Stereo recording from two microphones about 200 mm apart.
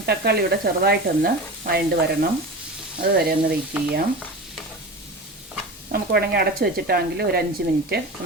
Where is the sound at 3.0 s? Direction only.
50° right (ahead or behind).